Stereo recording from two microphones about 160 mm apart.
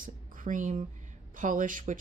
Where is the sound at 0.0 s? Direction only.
55° right (ahead or behind).